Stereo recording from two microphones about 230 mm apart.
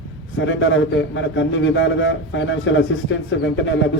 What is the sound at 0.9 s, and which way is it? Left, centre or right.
A man's voice, left.